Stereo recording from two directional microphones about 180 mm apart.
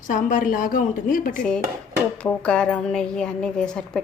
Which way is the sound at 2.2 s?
5° left (ahead or behind).